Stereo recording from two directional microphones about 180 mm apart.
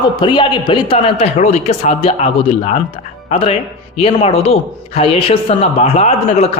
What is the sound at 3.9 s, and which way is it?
A man's voice, 35° left (ahead or behind).